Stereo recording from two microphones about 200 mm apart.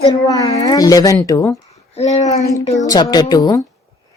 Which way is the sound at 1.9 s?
30° left (ahead or behind).